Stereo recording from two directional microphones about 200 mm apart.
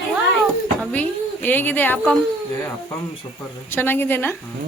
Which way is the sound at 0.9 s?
10° left (ahead or behind).